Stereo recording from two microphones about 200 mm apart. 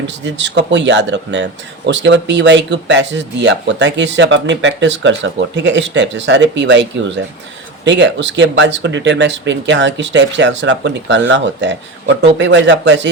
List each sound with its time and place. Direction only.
0.1 s speech: 65° right (ahead or behind)